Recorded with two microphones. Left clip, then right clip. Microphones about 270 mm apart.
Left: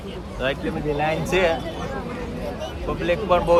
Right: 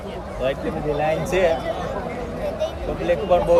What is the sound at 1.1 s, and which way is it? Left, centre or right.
Speech, centre.